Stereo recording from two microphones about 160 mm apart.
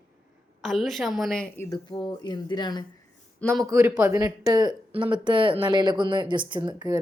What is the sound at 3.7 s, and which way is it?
A man's voice, 20° right (ahead or behind).